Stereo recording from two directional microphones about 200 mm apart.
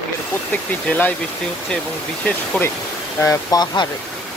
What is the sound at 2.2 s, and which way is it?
Speech, 5° left (ahead or behind).